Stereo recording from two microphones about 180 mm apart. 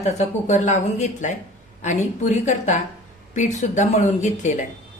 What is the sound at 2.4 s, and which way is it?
Speech, 40° left (ahead or behind).